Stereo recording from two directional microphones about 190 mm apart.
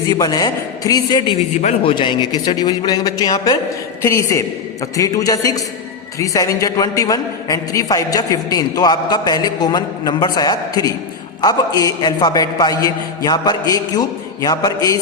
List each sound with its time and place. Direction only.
0.1 s a woman's voice: 20° left (ahead or behind)